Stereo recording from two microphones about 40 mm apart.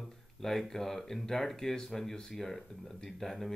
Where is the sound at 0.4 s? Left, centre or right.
Centre.